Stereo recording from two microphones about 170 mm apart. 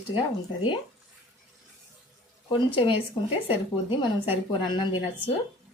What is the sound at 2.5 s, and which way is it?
A woman's voice, 30° left (ahead or behind).